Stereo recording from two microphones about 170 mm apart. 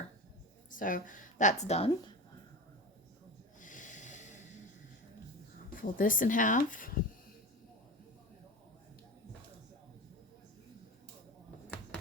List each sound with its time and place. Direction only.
0.7 s a woman's voice: 50° left (ahead or behind)
3.6 s snort: 50° left (ahead or behind)
5.7 s speech: 55° left (ahead or behind)